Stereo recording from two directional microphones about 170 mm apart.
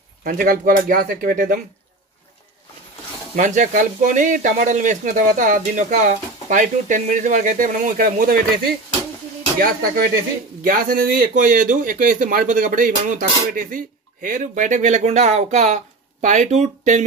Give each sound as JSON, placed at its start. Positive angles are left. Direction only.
{"t": 0.2, "sound": "speech", "side_deg": -55}
{"t": 3.3, "sound": "speech", "side_deg": -45}
{"t": 9.6, "sound": "speech", "side_deg": -60}